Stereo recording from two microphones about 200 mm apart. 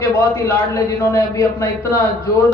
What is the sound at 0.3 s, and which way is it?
A man's voice, 15° left (ahead or behind).